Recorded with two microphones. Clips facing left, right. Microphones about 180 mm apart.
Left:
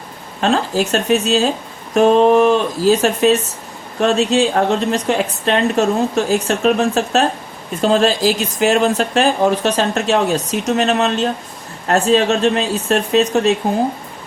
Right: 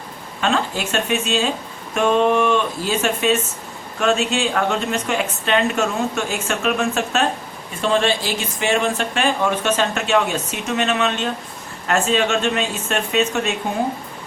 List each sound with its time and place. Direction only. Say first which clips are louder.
0.4 s a woman's voice: left 5 dB; 40° left (ahead or behind)